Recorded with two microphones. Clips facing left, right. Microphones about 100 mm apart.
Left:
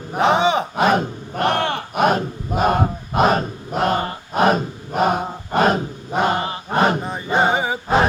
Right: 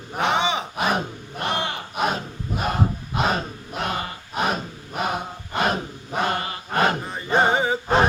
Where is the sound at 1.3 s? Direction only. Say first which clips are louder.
Left 7 dB; 60° left (ahead or behind).